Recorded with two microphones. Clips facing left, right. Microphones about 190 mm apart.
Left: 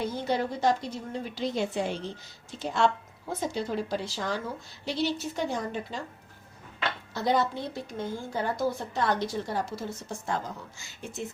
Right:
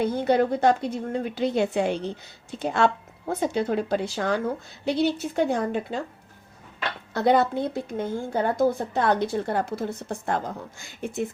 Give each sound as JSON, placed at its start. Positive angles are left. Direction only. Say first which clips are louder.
{"t": 0.0, "sound": "a woman's voice", "louder": "right 7 dB", "side_deg": -60}
{"t": 7.1, "sound": "a woman's voice", "louder": "right 6 dB", "side_deg": -60}